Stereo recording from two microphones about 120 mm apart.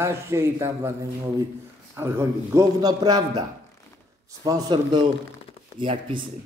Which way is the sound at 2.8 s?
35° right (ahead or behind).